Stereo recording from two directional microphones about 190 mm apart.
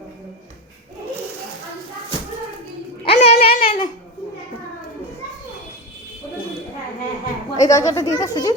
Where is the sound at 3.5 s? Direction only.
50° left (ahead or behind).